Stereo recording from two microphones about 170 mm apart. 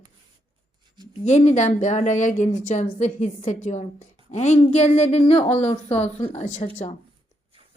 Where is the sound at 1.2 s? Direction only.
40° left (ahead or behind).